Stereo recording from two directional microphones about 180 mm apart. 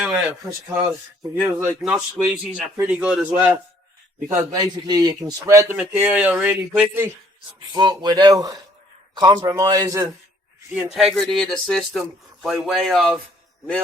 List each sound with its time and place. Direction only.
0.0 s a man's voice: 5° right (ahead or behind)
4.4 s a man's voice: 20° right (ahead or behind)
7.7 s speech: 25° right (ahead or behind)
10.7 s speech: centre (ahead or behind)